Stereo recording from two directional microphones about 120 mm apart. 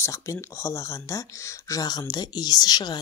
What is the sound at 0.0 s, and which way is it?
Speech, 25° left (ahead or behind).